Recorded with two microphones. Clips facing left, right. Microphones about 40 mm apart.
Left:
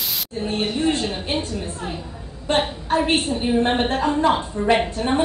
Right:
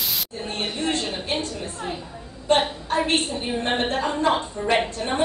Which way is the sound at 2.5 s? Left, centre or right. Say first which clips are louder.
Even; centre.